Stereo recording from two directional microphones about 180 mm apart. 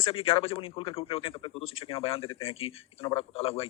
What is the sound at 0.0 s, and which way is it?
Speech, 30° left (ahead or behind).